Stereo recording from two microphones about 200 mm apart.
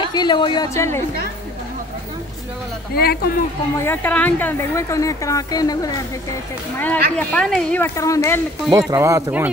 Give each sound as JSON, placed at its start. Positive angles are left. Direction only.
{"t": 0.1, "sound": "a woman's voice", "side_deg": 20}
{"t": 2.9, "sound": "speech", "side_deg": 50}
{"t": 3.7, "sound": "a woman's voice", "side_deg": 10}
{"t": 6.8, "sound": "a woman's voice", "side_deg": 10}
{"t": 8.7, "sound": "speech", "side_deg": -15}